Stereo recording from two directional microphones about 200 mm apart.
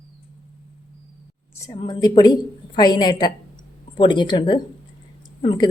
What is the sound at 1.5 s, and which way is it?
A woman's voice, 20° left (ahead or behind).